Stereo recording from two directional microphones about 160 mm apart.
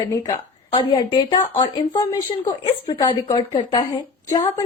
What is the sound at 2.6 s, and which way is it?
Speech, 30° left (ahead or behind).